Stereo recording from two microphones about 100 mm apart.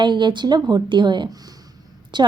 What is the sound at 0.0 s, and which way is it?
A woman's voice, 50° right (ahead or behind).